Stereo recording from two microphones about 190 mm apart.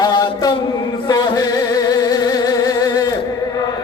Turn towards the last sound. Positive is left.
turn(degrees=20)  # may be behind; listen again after turning